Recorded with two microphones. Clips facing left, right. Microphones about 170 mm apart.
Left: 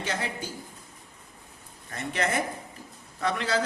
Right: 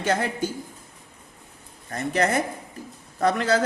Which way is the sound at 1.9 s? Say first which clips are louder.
Right 6 dB; 40° right (ahead or behind).